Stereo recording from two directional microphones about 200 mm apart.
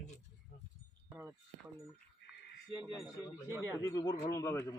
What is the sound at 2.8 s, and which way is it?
Speech, centre (ahead or behind).